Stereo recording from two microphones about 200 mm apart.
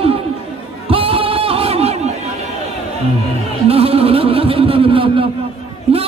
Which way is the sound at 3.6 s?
30° right (ahead or behind).